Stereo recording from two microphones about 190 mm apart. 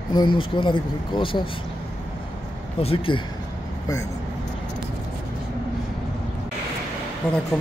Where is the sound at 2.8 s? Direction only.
30° left (ahead or behind).